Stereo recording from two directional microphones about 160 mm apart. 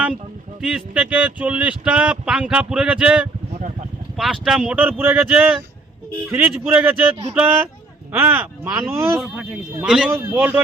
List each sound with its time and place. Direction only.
0.6 s speech: 5° right (ahead or behind)
9.1 s speech: centre (ahead or behind)